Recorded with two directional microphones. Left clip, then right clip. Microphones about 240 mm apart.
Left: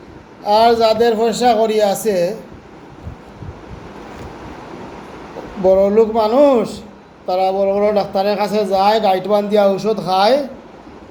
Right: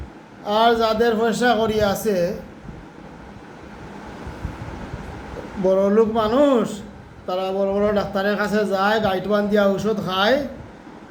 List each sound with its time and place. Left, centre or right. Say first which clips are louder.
0.5 s a man's voice: left 6 dB; centre
5.6 s speech: left 5 dB; centre
9.8 s speech: left 5 dB; right
10.1 s speech: left 6 dB; left